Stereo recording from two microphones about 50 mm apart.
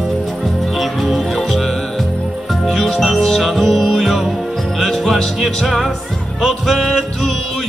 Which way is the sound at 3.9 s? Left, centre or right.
Centre.